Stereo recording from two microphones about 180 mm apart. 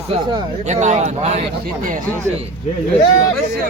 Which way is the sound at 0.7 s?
40° right (ahead or behind).